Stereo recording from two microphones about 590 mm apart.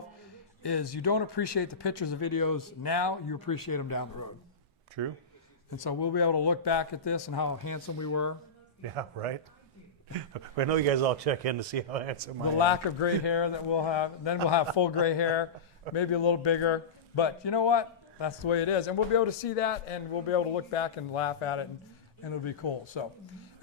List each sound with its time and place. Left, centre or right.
0.6 s speech: left
5.0 s speech: right
5.7 s speech: left
9.0 s speech: right
10.3 s speech: right
12.5 s a man's voice: left